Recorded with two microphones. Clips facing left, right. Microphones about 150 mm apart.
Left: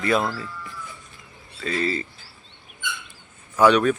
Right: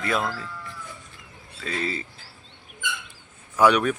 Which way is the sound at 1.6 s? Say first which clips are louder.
Left 4 dB; centre (ahead or behind).